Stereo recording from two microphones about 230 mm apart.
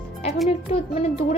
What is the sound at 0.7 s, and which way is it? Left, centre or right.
Speech, left.